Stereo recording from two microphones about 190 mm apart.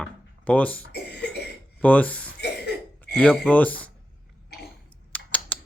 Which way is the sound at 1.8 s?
5° left (ahead or behind).